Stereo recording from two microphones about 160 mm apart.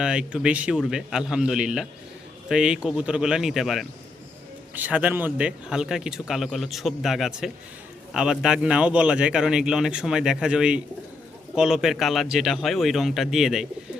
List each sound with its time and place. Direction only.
0.0 s speech: 5° right (ahead or behind)